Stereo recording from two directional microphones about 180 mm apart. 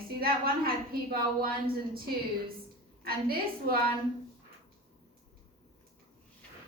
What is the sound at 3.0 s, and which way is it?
Speech, 55° right (ahead or behind).